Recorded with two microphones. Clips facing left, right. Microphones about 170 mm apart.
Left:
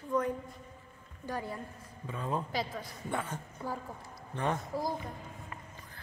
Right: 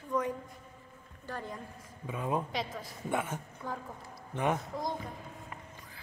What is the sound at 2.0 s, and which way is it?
Speech, 15° right (ahead or behind).